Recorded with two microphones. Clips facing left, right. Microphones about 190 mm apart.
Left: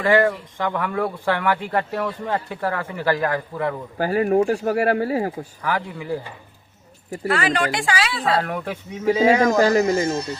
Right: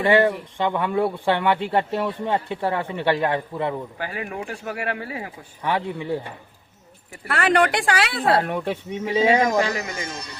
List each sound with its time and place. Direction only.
0.0 s speech: 25° right (ahead or behind)
3.9 s speech: 40° left (ahead or behind)
5.6 s speech: 25° right (ahead or behind)
7.3 s speech: 60° right (ahead or behind)
8.4 s speech: 20° right (ahead or behind)
9.6 s speech: 40° left (ahead or behind)
10.1 s speech: 25° left (ahead or behind)